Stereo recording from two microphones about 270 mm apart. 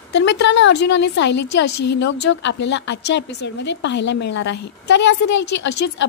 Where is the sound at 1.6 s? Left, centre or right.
Left.